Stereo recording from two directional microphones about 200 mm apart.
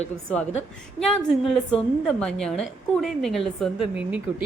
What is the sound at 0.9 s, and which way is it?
A woman's voice, centre (ahead or behind).